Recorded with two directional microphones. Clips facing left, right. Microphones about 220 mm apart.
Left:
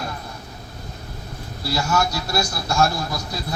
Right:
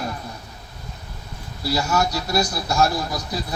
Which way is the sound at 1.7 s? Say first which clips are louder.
Even; 20° right (ahead or behind).